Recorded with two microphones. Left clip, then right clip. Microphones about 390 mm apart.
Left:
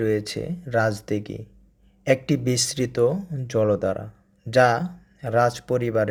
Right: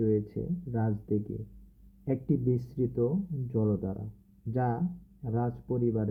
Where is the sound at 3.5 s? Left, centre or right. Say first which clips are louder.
Left 11 dB; left.